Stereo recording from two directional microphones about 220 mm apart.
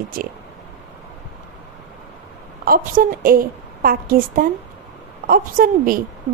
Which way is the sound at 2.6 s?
40° right (ahead or behind).